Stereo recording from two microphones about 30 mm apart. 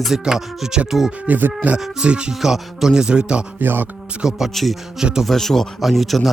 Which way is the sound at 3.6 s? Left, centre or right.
Right.